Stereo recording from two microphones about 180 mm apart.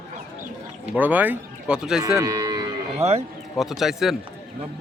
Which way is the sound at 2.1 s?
20° right (ahead or behind).